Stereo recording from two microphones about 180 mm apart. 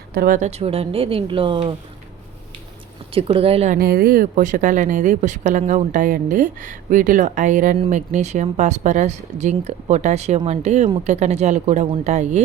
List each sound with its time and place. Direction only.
0.1 s speech: 50° right (ahead or behind); by 1.7 s 30° right (ahead or behind)
3.2 s speech: 30° right (ahead or behind)
3.8 s a woman's voice: 55° right (ahead or behind)